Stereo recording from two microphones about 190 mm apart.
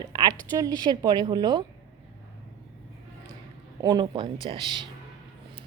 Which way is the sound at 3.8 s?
20° right (ahead or behind).